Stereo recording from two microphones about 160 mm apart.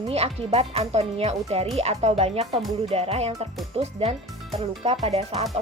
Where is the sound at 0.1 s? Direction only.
40° right (ahead or behind).